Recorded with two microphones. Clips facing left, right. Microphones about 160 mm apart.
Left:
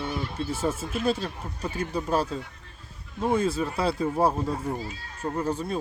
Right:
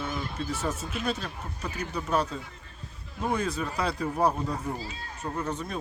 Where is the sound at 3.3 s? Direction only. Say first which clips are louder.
Left 5 dB; 25° left (ahead or behind).